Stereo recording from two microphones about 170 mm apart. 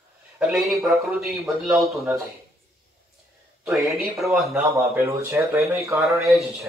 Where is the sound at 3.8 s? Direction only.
Centre (ahead or behind).